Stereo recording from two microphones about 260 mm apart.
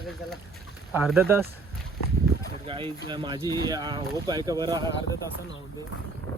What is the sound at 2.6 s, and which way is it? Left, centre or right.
Speech, right.